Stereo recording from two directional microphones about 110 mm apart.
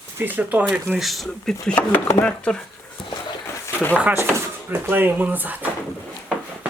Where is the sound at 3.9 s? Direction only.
15° right (ahead or behind).